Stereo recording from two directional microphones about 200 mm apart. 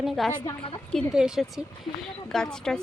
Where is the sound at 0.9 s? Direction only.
Centre (ahead or behind).